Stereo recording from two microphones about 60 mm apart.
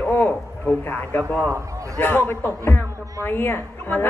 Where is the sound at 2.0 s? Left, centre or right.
Left.